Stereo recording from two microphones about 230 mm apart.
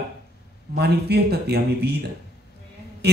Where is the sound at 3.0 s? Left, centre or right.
Right.